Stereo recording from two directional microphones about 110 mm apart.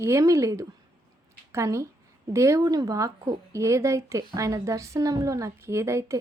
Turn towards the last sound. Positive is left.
turn(degrees=-25)  # may be behind; listen again after turning